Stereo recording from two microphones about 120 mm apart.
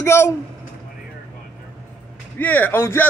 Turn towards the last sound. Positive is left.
turn(degrees=20)  # may be behind; listen again after turning